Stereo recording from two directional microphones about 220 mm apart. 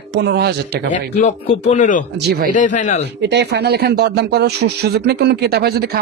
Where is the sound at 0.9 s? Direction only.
35° left (ahead or behind).